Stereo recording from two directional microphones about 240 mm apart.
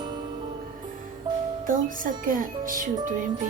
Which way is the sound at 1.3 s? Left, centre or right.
Centre.